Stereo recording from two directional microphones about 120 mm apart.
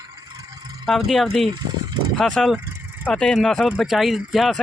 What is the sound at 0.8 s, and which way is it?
Speech, centre (ahead or behind).